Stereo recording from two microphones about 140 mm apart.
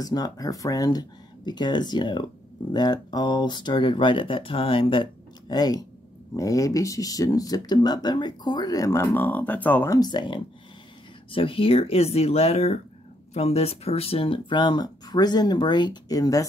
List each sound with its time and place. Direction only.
0.0 s speech: 25° left (ahead or behind)
5.5 s speech: 30° left (ahead or behind)
9.9 s speech: 30° left (ahead or behind)